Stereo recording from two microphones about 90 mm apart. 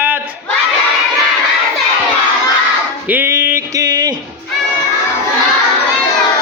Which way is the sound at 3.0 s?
20° right (ahead or behind).